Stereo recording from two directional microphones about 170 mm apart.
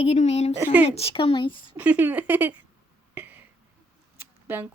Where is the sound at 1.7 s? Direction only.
10° right (ahead or behind).